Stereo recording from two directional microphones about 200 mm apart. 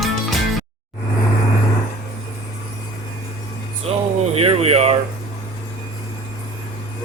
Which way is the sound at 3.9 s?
30° right (ahead or behind).